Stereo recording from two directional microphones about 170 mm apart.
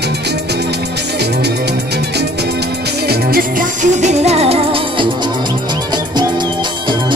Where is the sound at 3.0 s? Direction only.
65° right (ahead or behind); by 5.1 s 35° right (ahead or behind).